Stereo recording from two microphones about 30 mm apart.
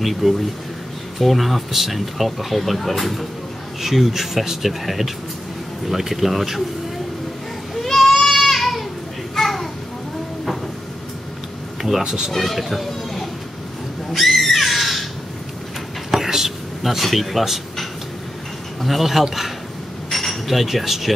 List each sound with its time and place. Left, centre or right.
0.0 s speech: centre
3.8 s speech: centre
7.7 s a sound: centre
9.3 s children playing: centre
12.0 s speech: centre
12.3 s speech: centre
14.1 s a sound: centre
16.3 s a sound: centre
18.8 s speech: centre
20.1 s cutlery: centre
20.4 s speech: centre